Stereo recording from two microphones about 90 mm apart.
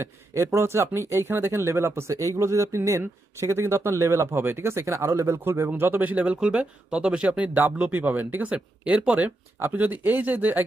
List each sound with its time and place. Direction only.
0.0 s speech: 30° right (ahead or behind)